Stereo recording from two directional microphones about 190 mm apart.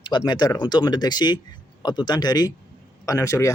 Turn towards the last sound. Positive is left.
turn(degrees=15)  # may be behind; listen again after turning